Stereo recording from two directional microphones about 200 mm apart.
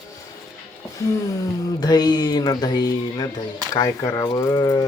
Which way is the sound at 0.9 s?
15° left (ahead or behind).